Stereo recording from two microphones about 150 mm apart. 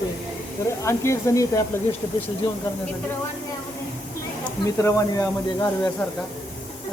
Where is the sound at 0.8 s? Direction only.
20° left (ahead or behind).